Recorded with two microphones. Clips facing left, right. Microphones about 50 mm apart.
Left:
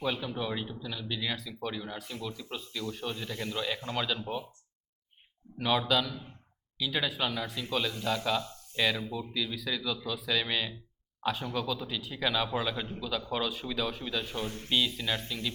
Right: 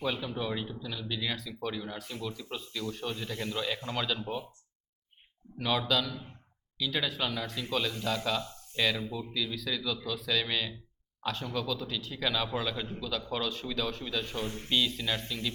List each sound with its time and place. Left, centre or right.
0.0 s speech: centre
5.5 s speech: centre